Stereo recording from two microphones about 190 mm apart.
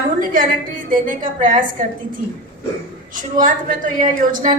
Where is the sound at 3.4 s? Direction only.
45° right (ahead or behind).